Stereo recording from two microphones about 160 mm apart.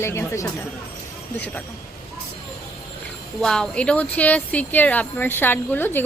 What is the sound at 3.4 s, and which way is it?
Speech, 5° left (ahead or behind).